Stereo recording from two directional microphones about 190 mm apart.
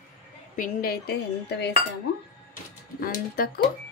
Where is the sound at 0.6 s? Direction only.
50° left (ahead or behind).